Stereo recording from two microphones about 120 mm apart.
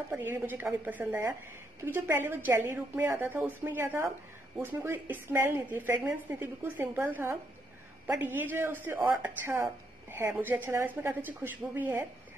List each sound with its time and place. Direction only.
0.1 s a woman's voice: 20° right (ahead or behind)